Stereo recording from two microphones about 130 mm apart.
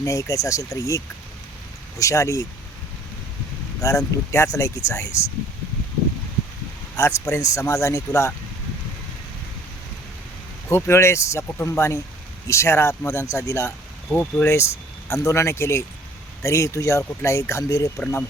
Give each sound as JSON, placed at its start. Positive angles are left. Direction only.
{"t": 0.0, "sound": "speech", "side_deg": 25}
{"t": 3.8, "sound": "speech", "side_deg": 25}
{"t": 6.9, "sound": "speech", "side_deg": 20}
{"t": 10.7, "sound": "speech", "side_deg": 20}
{"t": 14.1, "sound": "speech", "side_deg": 10}
{"t": 14.5, "sound": "speech", "side_deg": 20}
{"t": 17.9, "sound": "speech", "side_deg": 15}